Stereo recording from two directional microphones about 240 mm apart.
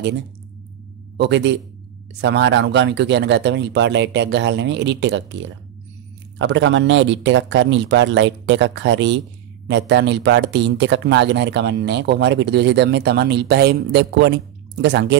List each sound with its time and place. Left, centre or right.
1.1 s speech: right